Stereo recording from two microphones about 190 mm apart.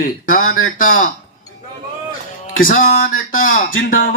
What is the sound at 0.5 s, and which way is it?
Speech, 90° left.